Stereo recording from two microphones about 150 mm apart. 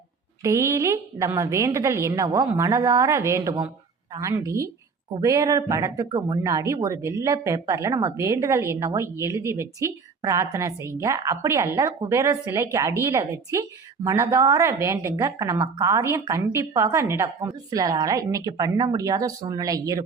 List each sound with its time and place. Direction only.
0.4 s speech: 20° right (ahead or behind)